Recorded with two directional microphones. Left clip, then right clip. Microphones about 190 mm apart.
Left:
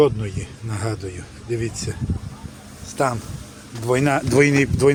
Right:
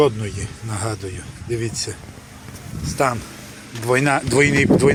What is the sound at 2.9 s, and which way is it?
Speech, 5° left (ahead or behind).